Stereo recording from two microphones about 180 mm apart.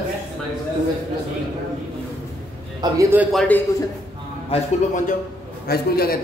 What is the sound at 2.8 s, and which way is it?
Speech, 15° right (ahead or behind).